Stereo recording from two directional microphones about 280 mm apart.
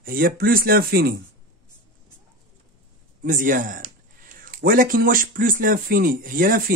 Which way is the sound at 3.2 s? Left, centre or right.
Right.